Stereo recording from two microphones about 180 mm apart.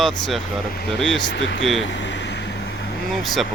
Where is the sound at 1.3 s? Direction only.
90° left.